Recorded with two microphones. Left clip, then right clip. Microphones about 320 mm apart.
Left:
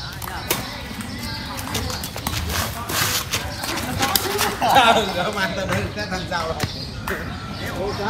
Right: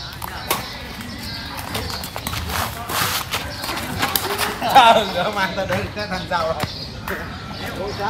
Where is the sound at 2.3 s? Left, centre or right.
Centre.